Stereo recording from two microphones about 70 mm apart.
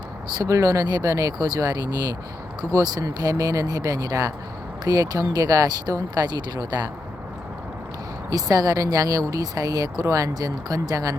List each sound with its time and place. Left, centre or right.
0.4 s speech: right
8.3 s speech: right